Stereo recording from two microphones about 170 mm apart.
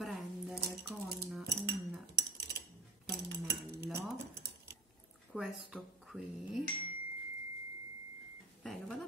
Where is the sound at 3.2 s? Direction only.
70° right (ahead or behind).